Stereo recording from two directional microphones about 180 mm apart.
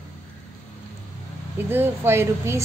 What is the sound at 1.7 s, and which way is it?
Speech, 10° right (ahead or behind).